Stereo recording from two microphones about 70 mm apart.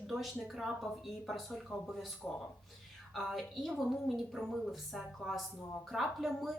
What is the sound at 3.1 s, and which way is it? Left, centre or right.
Speech, centre.